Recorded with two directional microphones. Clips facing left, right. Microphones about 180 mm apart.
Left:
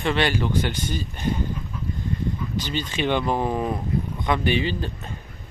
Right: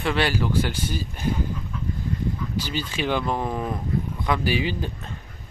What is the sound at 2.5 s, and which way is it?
Speech, 10° right (ahead or behind).